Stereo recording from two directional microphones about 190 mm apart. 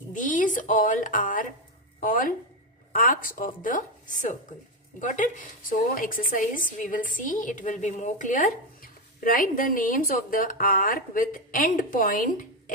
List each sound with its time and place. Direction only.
0.1 s a woman's voice: 45° left (ahead or behind)